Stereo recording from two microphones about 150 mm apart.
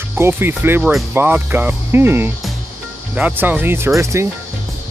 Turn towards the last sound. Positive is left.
turn(degrees=-20)  # may be behind; listen again after turning